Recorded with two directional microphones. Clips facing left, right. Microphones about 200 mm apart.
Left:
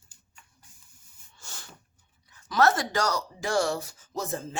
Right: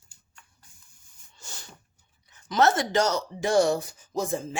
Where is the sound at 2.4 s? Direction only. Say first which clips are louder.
Right 1 dB; 25° right (ahead or behind).